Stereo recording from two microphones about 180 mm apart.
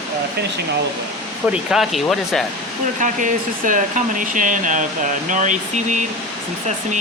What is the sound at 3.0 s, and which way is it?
Speech, 45° right (ahead or behind).